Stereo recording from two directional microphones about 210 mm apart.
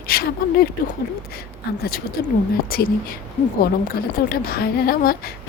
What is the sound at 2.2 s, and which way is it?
Speech, 45° left (ahead or behind).